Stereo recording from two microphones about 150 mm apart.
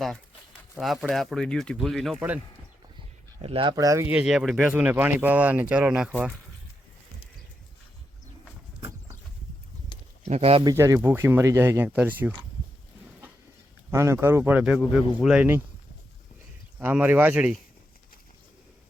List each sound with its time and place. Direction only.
0.8 s speech: centre (ahead or behind)
3.4 s speech: 35° right (ahead or behind); by 4.1 s 20° right (ahead or behind)
4.1 s speech: 5° right (ahead or behind)
10.2 s speech: 45° right (ahead or behind)
10.6 s speech: 25° right (ahead or behind)
13.9 s speech: 20° right (ahead or behind)
14.6 s speech: centre (ahead or behind)
16.7 s speech: 10° right (ahead or behind)